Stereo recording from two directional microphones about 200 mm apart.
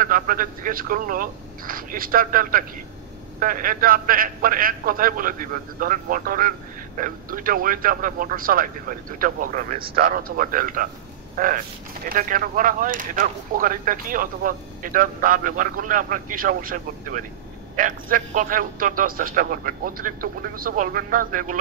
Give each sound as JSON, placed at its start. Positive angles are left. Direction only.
{"t": 0.0, "sound": "speech", "side_deg": -45}